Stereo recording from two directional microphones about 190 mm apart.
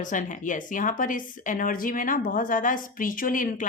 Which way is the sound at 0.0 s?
40° left (ahead or behind).